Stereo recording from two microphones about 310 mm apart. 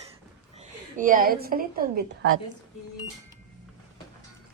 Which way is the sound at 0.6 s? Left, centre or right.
Right.